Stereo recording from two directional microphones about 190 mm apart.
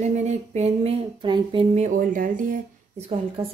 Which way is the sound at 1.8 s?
45° right (ahead or behind).